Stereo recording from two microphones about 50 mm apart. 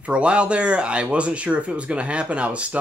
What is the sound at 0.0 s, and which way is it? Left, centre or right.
Speech, right.